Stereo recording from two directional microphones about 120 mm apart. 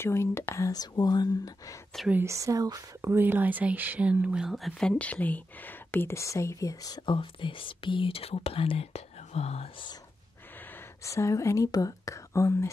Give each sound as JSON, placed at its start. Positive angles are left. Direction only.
{"t": 0.0, "sound": "speech", "side_deg": 20}
{"t": 2.2, "sound": "speech", "side_deg": -25}
{"t": 7.2, "sound": "speech", "side_deg": 45}
{"t": 11.1, "sound": "speech", "side_deg": 25}